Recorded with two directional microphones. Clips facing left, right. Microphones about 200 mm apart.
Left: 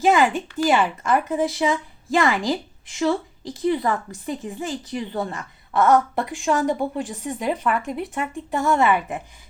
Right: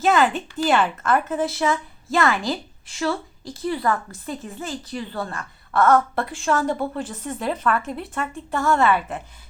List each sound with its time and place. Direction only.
0.0 s a woman's voice: 15° left (ahead or behind)